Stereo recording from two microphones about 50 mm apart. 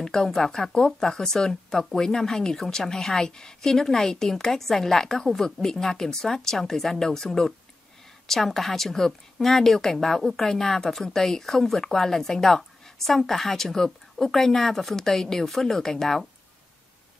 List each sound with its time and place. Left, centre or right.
0.0 s speech: centre